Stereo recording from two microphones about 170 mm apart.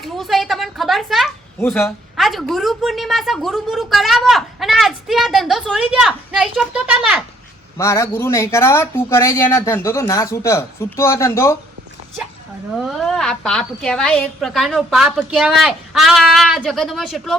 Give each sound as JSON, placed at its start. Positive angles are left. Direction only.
{"t": 0.0, "sound": "a sound", "side_deg": 0}
{"t": 1.5, "sound": "speech", "side_deg": 15}
{"t": 2.1, "sound": "a woman's voice", "side_deg": 0}
{"t": 7.8, "sound": "speech", "side_deg": 15}
{"t": 12.7, "sound": "a woman's voice", "side_deg": 0}